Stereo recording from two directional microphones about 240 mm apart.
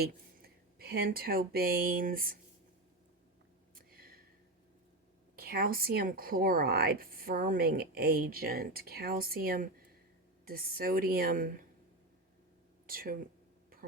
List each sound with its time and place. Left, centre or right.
0.0 s speech: right
3.8 s a sound: right
5.4 s speech: right
12.9 s speech: right